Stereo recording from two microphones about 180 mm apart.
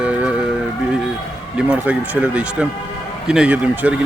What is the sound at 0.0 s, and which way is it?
Music, 5° right (ahead or behind).